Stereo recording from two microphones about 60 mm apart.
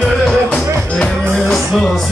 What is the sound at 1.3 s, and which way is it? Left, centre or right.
Music, centre.